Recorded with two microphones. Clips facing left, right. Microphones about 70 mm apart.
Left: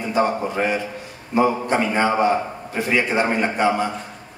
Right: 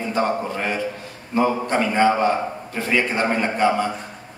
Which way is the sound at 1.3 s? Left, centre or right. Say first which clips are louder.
Left 1 dB; centre.